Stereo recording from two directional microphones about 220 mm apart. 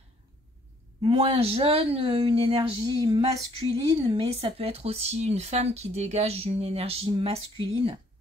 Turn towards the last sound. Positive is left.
turn(degrees=-25)  # may be behind; listen again after turning